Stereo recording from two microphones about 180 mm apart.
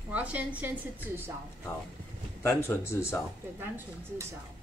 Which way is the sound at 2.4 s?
15° left (ahead or behind).